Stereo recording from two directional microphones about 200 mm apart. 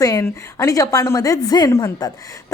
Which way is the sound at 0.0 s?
15° left (ahead or behind).